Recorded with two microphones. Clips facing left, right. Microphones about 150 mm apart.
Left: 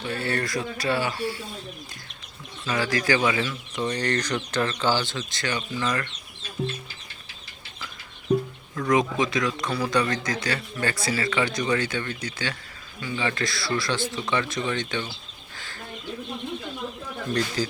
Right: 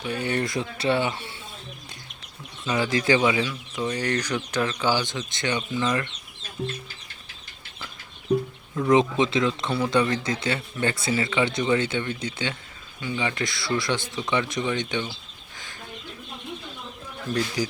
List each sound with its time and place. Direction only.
0.0 s speech: 15° right (ahead or behind)
2.6 s speech: 20° right (ahead or behind)
8.9 s speech: 25° right (ahead or behind)
15.5 s chicken: 15° right (ahead or behind)
17.6 s speech: 15° right (ahead or behind)